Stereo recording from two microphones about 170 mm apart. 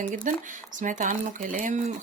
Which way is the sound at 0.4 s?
50° right (ahead or behind).